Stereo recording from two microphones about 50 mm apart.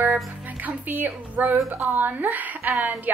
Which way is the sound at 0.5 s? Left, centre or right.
Right.